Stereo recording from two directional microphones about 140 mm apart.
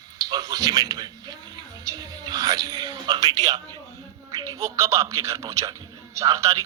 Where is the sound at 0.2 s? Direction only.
30° right (ahead or behind).